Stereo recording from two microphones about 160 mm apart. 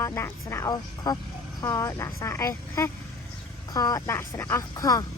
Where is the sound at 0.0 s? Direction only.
20° left (ahead or behind).